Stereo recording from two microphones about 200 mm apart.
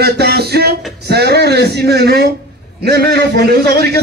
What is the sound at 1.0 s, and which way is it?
A man's voice, 55° right (ahead or behind).